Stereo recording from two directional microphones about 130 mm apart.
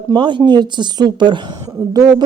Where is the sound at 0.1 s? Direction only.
35° right (ahead or behind).